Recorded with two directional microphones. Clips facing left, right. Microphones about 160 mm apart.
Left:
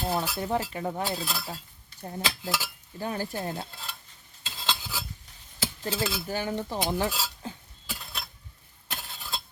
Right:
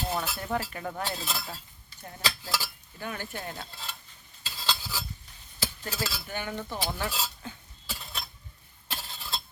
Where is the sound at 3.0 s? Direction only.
35° left (ahead or behind).